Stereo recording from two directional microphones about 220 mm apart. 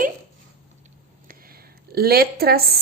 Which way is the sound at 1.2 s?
45° right (ahead or behind).